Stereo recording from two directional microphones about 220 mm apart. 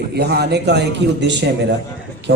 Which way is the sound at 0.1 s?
50° right (ahead or behind).